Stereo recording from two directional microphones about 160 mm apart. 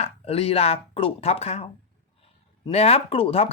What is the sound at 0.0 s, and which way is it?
Speech, 40° left (ahead or behind).